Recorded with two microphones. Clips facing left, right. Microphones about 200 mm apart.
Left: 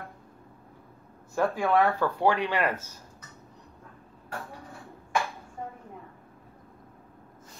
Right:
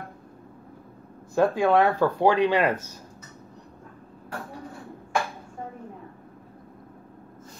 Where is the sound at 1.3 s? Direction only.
15° right (ahead or behind).